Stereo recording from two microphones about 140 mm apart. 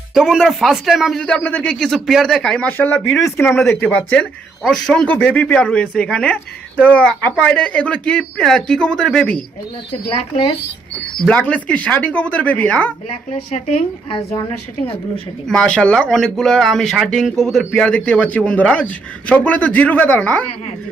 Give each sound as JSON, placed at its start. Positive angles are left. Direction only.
{"t": 0.1, "sound": "speech", "side_deg": 0}
{"t": 11.2, "sound": "speech", "side_deg": 10}
{"t": 13.3, "sound": "a woman's voice", "side_deg": 50}
{"t": 15.4, "sound": "speech", "side_deg": 5}